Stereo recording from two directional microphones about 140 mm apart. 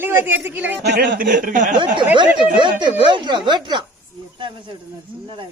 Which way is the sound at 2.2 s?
35° right (ahead or behind).